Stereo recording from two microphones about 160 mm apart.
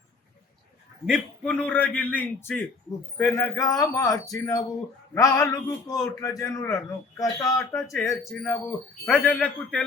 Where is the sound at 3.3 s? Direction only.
20° left (ahead or behind).